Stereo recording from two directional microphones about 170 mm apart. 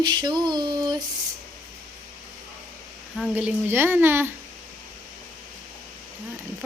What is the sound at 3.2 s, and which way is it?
A child's voice, 5° right (ahead or behind).